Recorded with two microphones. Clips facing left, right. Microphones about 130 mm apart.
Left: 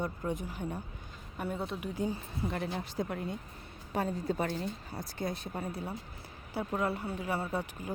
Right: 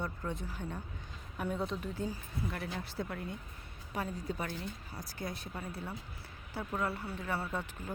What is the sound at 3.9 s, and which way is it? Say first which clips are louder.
A woman's voice: left 5 dB; 35° left (ahead or behind).